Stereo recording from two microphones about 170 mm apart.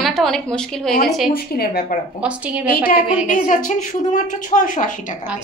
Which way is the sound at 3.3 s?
50° left (ahead or behind).